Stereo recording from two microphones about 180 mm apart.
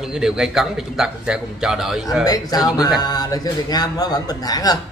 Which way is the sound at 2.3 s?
20° left (ahead or behind).